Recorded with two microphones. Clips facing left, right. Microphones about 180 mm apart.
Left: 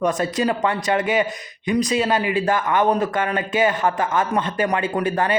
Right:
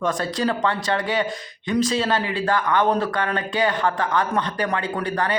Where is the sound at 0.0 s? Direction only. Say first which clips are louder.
Left 3 dB; 20° left (ahead or behind).